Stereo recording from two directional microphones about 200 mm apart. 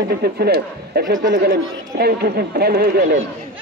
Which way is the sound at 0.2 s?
50° right (ahead or behind).